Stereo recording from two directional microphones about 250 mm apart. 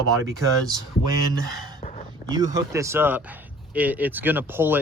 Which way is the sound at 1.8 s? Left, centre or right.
Left.